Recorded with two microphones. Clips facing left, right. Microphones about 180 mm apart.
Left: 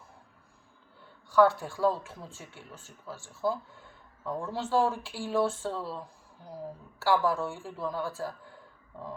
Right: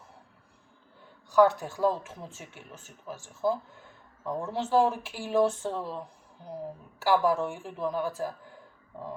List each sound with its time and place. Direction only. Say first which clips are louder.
1.4 s speech: right 1 dB; 20° right (ahead or behind)